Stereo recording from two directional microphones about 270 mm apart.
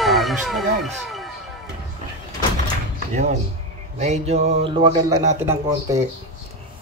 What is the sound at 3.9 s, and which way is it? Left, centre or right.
Speech, right.